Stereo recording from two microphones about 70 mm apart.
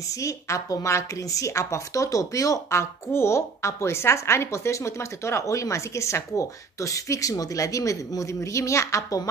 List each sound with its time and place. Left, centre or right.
0.1 s speech: left